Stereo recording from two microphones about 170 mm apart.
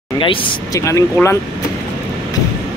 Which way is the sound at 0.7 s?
20° left (ahead or behind).